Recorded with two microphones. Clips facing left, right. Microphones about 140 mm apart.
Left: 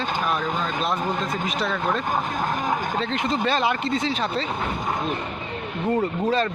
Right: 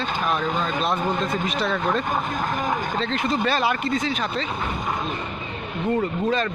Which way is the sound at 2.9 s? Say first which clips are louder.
Right 1 dB; 15° left (ahead or behind).